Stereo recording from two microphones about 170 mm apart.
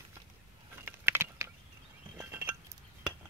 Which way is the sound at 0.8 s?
15° right (ahead or behind).